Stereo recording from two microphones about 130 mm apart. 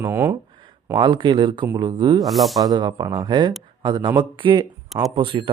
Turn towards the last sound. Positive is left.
turn(degrees=-40)  # may be behind; listen again after turning